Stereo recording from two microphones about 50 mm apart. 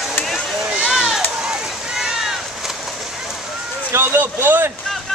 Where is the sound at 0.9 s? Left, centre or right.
Centre.